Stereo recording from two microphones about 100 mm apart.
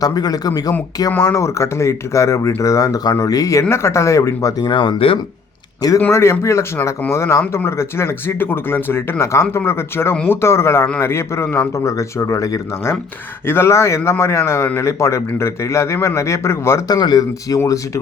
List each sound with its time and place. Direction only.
0.0 s speech: 40° left (ahead or behind)
4.6 s speech: 55° left (ahead or behind)
6.1 s speech: 25° left (ahead or behind)
16.9 s speech: 45° left (ahead or behind)
17.6 s speech: 30° left (ahead or behind)